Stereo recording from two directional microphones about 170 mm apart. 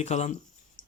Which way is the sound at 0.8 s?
50° left (ahead or behind).